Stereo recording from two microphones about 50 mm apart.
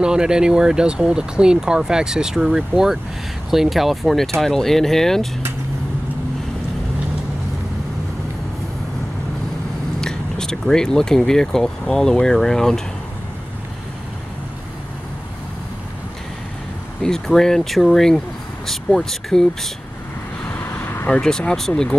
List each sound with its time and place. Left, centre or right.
0.0 s speech: centre
9.9 s speech: centre
17.0 s speech: centre
20.8 s vehicle: left
21.2 s speech: centre